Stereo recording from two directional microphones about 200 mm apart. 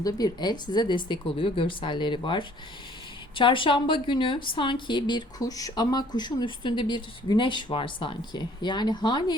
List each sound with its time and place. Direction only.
0.0 s a woman's voice: 20° left (ahead or behind)